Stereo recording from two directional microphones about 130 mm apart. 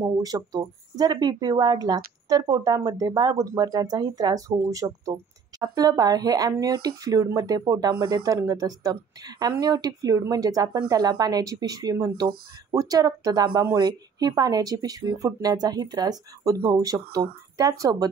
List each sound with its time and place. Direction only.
0.0 s speech: 30° right (ahead or behind)